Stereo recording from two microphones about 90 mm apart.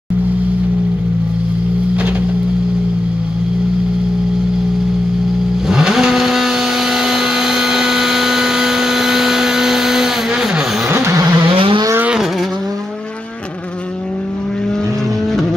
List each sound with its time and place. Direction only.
5.7 s vehicle: 5° right (ahead or behind)
10.9 s vehicle: 30° right (ahead or behind)
11.4 s vehicle: 75° right (ahead or behind)